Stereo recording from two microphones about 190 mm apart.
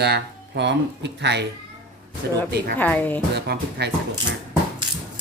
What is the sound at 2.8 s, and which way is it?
Speech, 10° left (ahead or behind).